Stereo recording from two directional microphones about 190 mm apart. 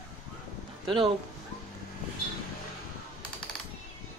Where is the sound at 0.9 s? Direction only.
25° right (ahead or behind).